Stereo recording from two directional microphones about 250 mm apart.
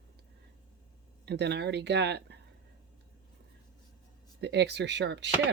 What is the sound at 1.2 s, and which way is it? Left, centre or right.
Speech, right.